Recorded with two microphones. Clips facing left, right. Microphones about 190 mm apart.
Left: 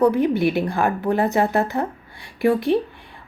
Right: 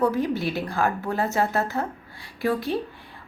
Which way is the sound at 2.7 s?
70° left (ahead or behind).